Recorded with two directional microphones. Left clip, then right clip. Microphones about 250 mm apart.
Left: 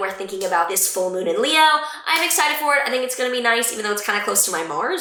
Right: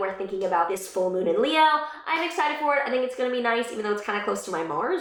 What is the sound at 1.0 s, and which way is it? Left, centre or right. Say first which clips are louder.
Speech: even; centre.